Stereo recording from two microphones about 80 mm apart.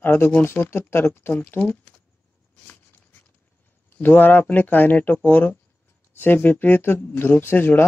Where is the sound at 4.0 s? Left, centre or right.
Left.